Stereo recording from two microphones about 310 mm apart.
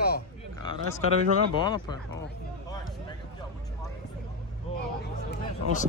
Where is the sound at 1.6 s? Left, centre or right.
Centre.